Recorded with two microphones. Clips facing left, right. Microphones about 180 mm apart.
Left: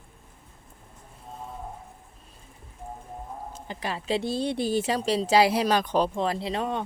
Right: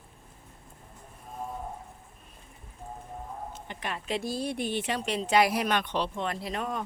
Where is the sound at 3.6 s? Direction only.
30° left (ahead or behind).